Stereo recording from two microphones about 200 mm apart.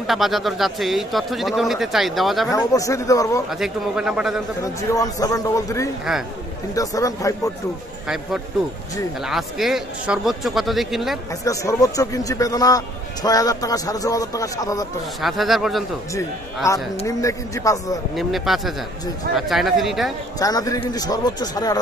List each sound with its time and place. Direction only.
0.0 s a man's voice: centre (ahead or behind)
2.5 s a man's voice: 15° left (ahead or behind)
3.4 s a man's voice: centre (ahead or behind)
4.9 s a man's voice: 15° left (ahead or behind)
9.2 s a man's voice: centre (ahead or behind)
11.4 s a man's voice: 15° left (ahead or behind)
15.2 s a man's voice: centre (ahead or behind)
16.6 s a man's voice: 15° left (ahead or behind)
18.1 s a man's voice: centre (ahead or behind)
20.3 s a man's voice: 20° left (ahead or behind)